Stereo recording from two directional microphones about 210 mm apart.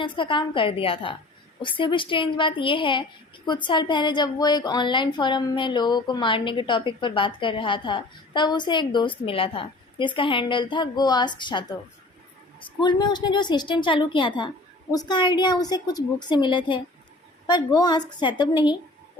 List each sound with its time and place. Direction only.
0.0 s a woman's voice: 25° left (ahead or behind)
12.8 s a woman's voice: 20° left (ahead or behind)